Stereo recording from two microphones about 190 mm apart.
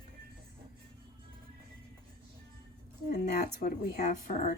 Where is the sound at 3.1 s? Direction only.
50° left (ahead or behind).